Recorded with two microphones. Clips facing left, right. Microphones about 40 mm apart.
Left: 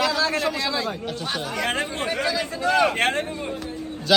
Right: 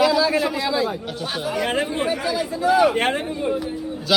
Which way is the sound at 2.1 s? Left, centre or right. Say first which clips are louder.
Right 2 dB; left.